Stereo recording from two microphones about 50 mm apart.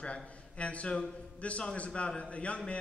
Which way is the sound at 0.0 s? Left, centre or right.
Left.